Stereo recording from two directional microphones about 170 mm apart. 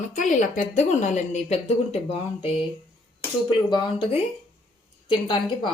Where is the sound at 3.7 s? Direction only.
25° left (ahead or behind).